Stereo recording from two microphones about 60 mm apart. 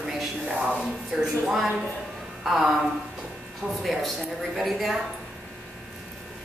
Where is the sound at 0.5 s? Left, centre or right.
Centre.